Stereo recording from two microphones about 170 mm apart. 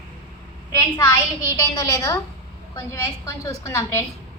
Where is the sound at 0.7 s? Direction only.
15° left (ahead or behind).